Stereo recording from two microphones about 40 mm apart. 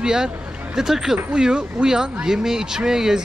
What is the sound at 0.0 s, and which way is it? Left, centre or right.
Speech, centre.